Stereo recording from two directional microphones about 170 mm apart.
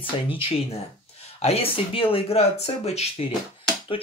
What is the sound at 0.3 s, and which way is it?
Speech, 35° left (ahead or behind).